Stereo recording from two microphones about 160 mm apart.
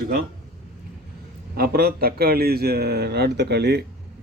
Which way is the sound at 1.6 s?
70° right (ahead or behind).